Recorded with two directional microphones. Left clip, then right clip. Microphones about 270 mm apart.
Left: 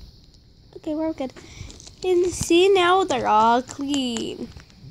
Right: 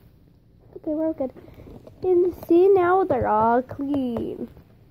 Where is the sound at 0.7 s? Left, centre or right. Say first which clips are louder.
Right 1 dB; left.